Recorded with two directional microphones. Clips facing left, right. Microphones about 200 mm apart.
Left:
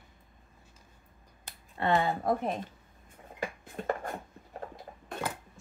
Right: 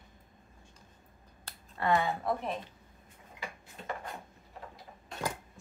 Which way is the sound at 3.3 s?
50° left (ahead or behind).